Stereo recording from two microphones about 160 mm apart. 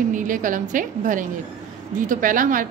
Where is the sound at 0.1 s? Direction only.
55° right (ahead or behind).